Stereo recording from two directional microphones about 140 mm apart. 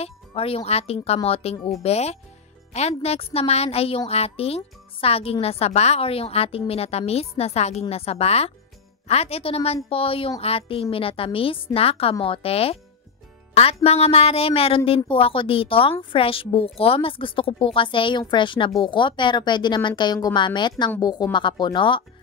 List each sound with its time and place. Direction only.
0.0 s a woman's voice: 45° left (ahead or behind)
13.8 s a woman's voice: 45° left (ahead or behind)